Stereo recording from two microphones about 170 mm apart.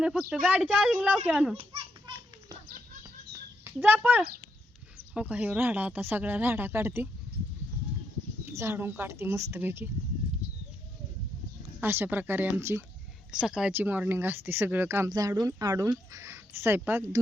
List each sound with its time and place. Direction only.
0.0 s speech: 5° right (ahead or behind)
1.5 s children playing: 30° right (ahead or behind)
3.6 s speech: 10° right (ahead or behind)
8.4 s speech: 15° right (ahead or behind)
11.8 s speech: 15° right (ahead or behind)